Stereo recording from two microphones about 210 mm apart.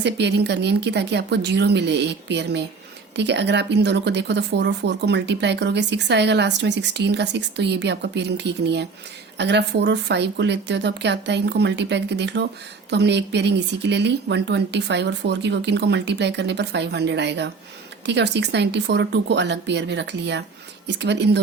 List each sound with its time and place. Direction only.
0.0 s speech: 55° right (ahead or behind)